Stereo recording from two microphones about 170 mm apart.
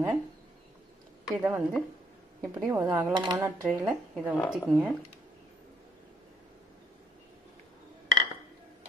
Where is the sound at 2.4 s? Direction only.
15° right (ahead or behind); by 4.7 s centre (ahead or behind).